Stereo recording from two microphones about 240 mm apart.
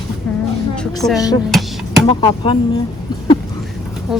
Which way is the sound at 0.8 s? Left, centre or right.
Centre.